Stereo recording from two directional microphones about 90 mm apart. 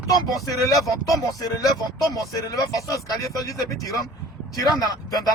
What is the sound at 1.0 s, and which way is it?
Speech, 40° left (ahead or behind).